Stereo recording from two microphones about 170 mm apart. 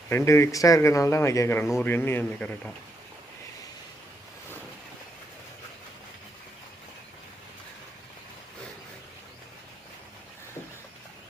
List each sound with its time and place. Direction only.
0.1 s speech: 15° left (ahead or behind)